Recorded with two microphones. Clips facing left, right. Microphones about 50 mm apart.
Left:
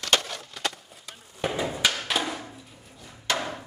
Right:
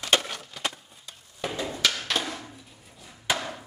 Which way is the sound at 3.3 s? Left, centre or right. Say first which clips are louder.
Even; centre.